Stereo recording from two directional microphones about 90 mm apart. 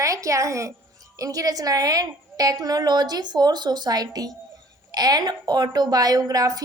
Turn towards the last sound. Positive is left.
turn(degrees=-40)  # may be behind; listen again after turning